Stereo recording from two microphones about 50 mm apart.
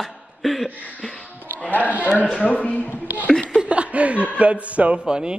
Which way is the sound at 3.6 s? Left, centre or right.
Right.